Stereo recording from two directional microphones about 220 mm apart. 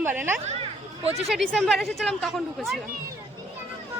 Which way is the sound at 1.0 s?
30° right (ahead or behind).